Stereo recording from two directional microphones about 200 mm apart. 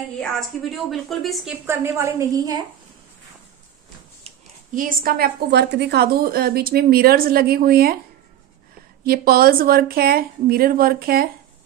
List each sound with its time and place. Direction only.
0.2 s a woman's voice: centre (ahead or behind)
1.7 s a woman's voice: 15° right (ahead or behind)
4.7 s a woman's voice: 45° right (ahead or behind)
9.0 s a woman's voice: 50° right (ahead or behind)